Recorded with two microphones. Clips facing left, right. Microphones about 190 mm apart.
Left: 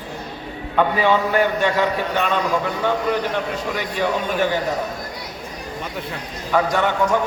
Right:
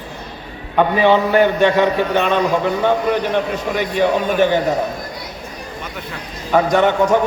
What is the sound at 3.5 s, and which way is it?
A man's voice, 20° right (ahead or behind).